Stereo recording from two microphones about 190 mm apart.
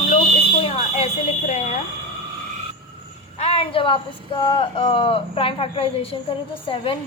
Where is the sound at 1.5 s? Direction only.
40° left (ahead or behind).